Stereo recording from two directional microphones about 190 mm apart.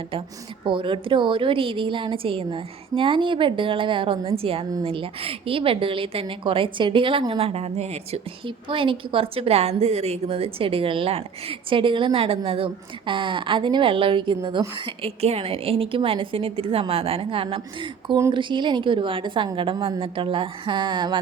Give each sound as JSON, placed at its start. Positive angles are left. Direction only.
{"t": 0.6, "sound": "a woman's voice", "side_deg": -25}